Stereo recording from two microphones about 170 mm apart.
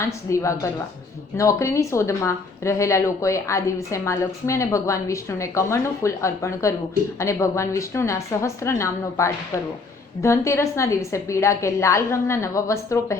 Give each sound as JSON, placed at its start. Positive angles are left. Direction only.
{"t": 0.0, "sound": "a woman's voice", "side_deg": 15}